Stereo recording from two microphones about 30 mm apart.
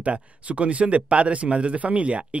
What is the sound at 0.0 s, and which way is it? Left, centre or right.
Speech, right.